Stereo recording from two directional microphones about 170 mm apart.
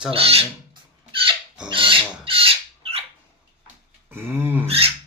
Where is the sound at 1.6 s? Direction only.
30° right (ahead or behind).